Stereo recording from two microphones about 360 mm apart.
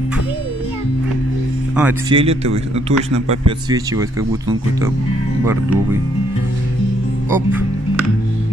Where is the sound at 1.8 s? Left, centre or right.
Centre.